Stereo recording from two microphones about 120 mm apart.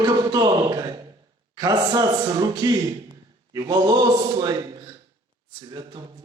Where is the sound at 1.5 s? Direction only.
35° right (ahead or behind).